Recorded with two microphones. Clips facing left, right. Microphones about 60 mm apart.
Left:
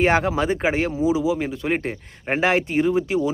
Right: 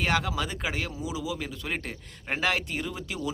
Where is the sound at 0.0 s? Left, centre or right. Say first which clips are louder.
Left 9 dB; left.